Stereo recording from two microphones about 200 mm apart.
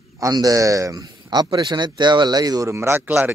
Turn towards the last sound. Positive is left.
turn(degrees=-10)  # may be behind; listen again after turning